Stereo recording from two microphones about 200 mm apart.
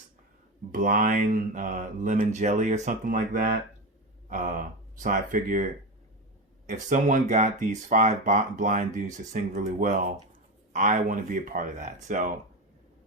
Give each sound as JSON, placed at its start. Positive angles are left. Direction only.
{"t": 0.7, "sound": "speech", "side_deg": -40}
{"t": 6.8, "sound": "speech", "side_deg": -40}